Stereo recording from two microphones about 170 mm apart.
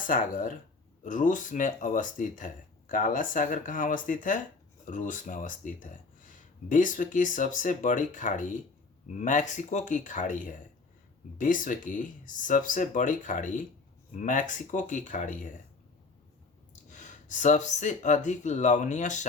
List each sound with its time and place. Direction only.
0.1 s speech: 50° left (ahead or behind)
16.9 s speech: 45° left (ahead or behind)